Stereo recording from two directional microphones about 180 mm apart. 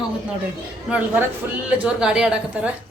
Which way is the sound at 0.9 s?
5° right (ahead or behind).